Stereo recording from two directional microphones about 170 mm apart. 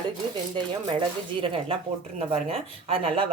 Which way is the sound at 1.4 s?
30° right (ahead or behind).